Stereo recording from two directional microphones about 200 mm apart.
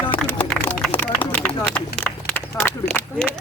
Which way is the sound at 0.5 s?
5° left (ahead or behind).